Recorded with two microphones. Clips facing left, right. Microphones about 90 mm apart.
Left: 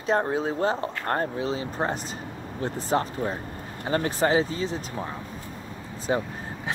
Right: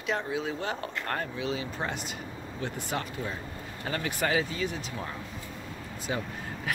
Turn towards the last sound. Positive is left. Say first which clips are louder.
# left 2 dB
turn(degrees=30)  # may be behind; listen again after turning